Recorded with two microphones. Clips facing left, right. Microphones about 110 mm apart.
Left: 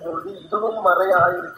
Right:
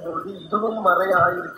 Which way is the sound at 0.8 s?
15° left (ahead or behind).